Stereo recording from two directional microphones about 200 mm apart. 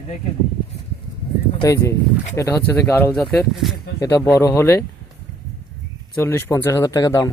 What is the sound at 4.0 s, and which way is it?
Speech, 15° left (ahead or behind).